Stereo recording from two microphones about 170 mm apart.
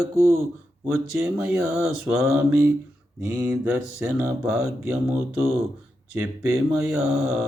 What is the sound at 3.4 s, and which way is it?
Mantra, 10° right (ahead or behind).